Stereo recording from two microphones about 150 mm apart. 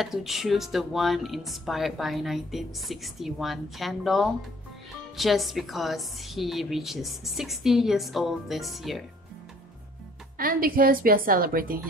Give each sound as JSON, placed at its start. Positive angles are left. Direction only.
{"t": 0.0, "sound": "speech", "side_deg": 0}
{"t": 10.3, "sound": "a woman's voice", "side_deg": -70}